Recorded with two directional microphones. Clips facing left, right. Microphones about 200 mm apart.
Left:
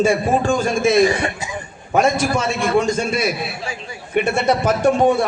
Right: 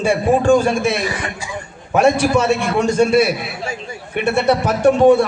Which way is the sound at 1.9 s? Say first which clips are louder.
Right 3 dB; 65° right (ahead or behind).